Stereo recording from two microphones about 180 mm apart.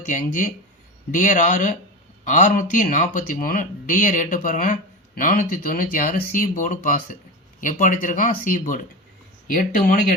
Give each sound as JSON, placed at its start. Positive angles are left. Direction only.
{"t": 0.0, "sound": "speech", "side_deg": 45}